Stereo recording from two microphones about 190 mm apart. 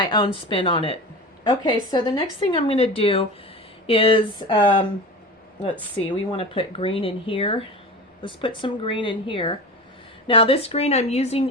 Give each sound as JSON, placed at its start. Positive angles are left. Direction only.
{"t": 0.0, "sound": "speech", "side_deg": 25}
{"t": 6.3, "sound": "speech", "side_deg": 30}